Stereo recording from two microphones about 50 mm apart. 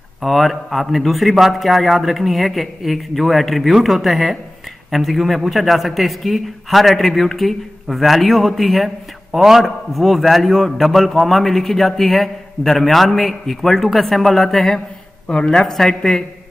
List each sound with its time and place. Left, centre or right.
0.2 s a man's voice: centre
15.2 s speech: centre
15.6 s speech: centre